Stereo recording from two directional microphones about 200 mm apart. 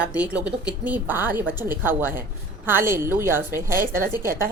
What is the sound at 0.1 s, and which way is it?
Speech, 5° right (ahead or behind).